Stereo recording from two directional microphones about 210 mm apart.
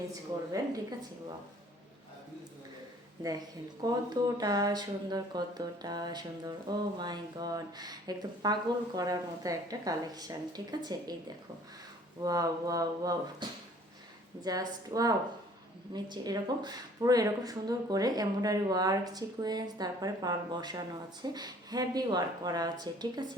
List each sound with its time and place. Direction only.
0.1 s speech: 15° right (ahead or behind)
3.8 s a woman's voice: 20° right (ahead or behind)
12.2 s a woman's voice: 15° right (ahead or behind)